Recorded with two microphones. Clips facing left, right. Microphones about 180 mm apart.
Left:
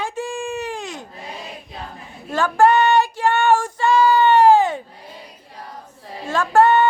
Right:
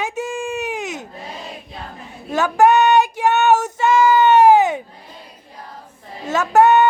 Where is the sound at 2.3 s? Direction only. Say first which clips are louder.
Right 1 dB; 15° right (ahead or behind).